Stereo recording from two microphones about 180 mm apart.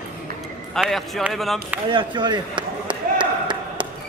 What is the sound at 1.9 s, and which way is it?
Speech, 25° right (ahead or behind).